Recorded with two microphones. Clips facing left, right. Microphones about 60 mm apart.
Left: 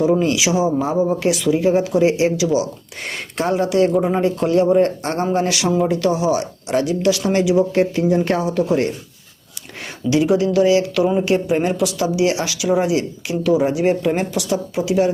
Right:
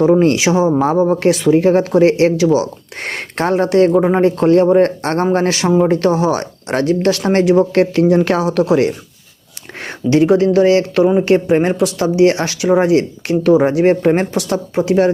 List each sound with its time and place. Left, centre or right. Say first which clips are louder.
0.2 s a woman's voice: right 5 dB; right
5.9 s a woman's voice: right 4 dB; right
9.8 s a woman's voice: right 5 dB; right